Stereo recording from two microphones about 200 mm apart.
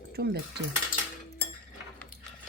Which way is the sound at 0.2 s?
50° right (ahead or behind).